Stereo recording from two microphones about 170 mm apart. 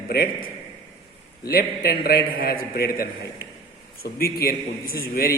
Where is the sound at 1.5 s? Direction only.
60° left (ahead or behind).